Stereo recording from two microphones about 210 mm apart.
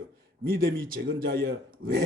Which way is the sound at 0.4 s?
45° right (ahead or behind).